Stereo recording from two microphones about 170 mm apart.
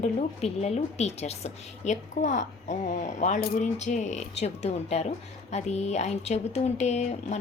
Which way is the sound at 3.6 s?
45° left (ahead or behind).